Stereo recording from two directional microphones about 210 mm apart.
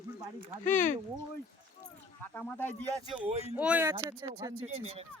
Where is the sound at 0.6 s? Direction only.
40° left (ahead or behind).